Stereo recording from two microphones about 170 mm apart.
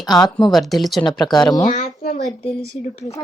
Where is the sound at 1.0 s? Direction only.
25° left (ahead or behind).